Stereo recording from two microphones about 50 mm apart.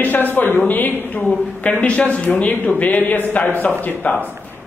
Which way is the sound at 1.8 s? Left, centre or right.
Left.